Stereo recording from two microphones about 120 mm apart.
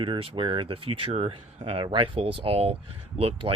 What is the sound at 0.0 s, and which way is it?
Speech, 45° right (ahead or behind).